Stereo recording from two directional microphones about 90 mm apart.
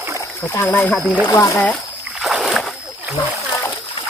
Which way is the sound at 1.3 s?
35° left (ahead or behind).